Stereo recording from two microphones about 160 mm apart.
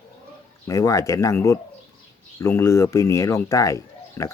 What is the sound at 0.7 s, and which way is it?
Speech, 20° left (ahead or behind).